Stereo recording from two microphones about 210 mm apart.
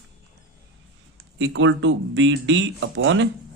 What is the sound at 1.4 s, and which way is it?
Speech, 60° right (ahead or behind).